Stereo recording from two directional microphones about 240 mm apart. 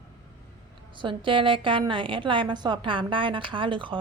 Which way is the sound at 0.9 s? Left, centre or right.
Right.